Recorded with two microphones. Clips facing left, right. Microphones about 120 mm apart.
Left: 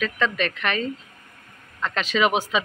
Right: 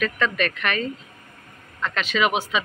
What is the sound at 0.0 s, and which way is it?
Speech, 25° left (ahead or behind).